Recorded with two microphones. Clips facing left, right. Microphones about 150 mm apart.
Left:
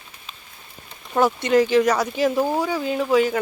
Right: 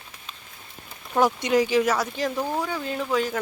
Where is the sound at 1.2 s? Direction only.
10° right (ahead or behind).